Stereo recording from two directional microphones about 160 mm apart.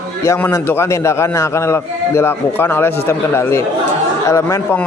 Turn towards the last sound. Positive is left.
turn(degrees=15)  # may be behind; listen again after turning